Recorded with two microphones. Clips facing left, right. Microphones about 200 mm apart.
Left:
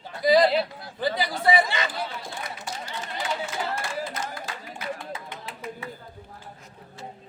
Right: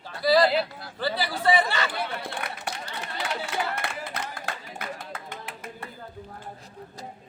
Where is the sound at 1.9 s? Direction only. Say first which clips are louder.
Right 2 dB; 65° right (ahead or behind).